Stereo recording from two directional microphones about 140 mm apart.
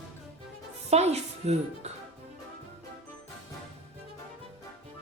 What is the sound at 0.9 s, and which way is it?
Speech, 50° right (ahead or behind).